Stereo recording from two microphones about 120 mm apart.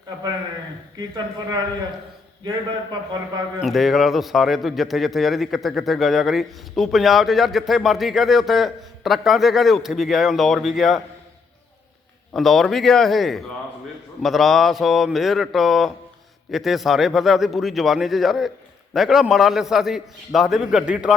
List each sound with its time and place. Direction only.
0.9 s speech: 30° right (ahead or behind)
3.6 s speech: centre (ahead or behind)
12.3 s speech: centre (ahead or behind)